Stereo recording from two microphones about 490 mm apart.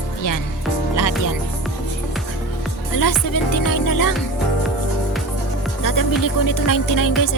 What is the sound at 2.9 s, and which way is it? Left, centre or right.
Speech, left.